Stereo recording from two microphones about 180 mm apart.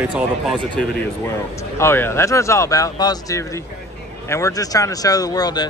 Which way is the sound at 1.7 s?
15° left (ahead or behind).